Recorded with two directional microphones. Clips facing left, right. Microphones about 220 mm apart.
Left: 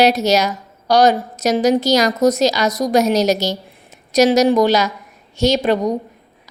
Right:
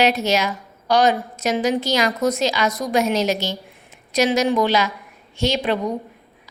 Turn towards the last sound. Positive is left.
turn(degrees=40)  # may be behind; listen again after turning